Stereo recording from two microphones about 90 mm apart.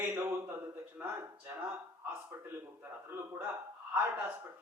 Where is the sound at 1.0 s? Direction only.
15° right (ahead or behind).